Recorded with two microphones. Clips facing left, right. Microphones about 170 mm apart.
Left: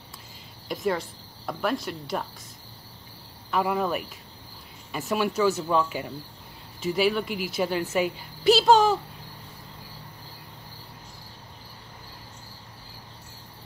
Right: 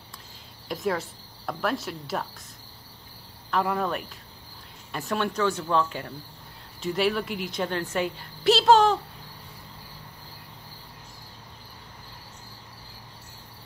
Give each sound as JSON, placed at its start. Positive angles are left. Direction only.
{"t": 0.7, "sound": "speech", "side_deg": 0}
{"t": 3.4, "sound": "a woman's voice", "side_deg": 5}